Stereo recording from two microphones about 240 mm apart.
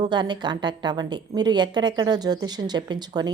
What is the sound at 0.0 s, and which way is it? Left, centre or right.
A woman's voice, centre.